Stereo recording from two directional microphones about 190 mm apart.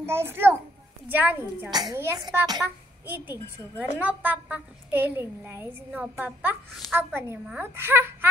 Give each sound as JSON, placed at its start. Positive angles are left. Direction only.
{"t": 0.0, "sound": "a woman's voice", "side_deg": -15}
{"t": 1.7, "sound": "a child's voice", "side_deg": -20}
{"t": 4.0, "sound": "a woman's voice", "side_deg": -10}